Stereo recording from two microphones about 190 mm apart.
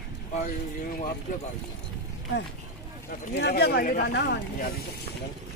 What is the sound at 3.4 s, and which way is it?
Speech, 60° left (ahead or behind).